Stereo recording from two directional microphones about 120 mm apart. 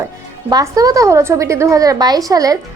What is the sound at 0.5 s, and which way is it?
A woman's voice, 30° right (ahead or behind).